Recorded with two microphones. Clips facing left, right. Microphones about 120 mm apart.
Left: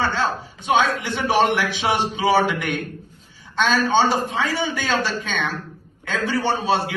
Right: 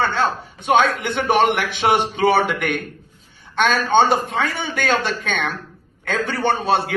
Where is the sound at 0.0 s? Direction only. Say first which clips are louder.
Right 2 dB; 60° right (ahead or behind).